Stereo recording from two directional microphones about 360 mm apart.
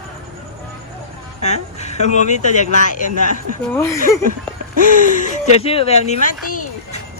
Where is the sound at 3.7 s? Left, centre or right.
Centre.